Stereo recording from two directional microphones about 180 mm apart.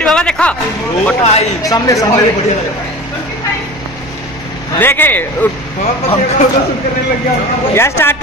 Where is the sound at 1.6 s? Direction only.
20° left (ahead or behind).